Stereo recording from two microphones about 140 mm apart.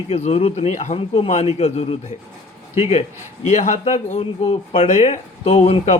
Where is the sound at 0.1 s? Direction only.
50° left (ahead or behind).